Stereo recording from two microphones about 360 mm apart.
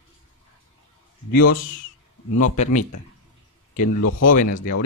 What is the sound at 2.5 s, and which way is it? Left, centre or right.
Speech, centre.